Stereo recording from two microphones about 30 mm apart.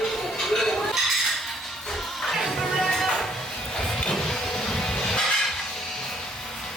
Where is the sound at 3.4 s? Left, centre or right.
Centre.